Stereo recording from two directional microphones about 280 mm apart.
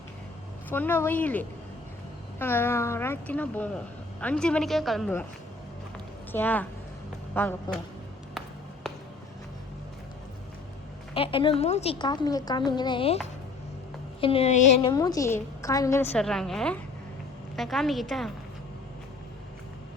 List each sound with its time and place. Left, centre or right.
0.7 s a woman's voice: centre
6.3 s a woman's voice: centre
11.1 s a woman's voice: centre
14.2 s a woman's voice: centre